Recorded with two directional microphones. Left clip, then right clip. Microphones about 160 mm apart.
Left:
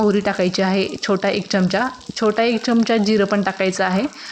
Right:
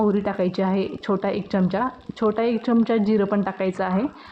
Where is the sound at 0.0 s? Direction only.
20° left (ahead or behind).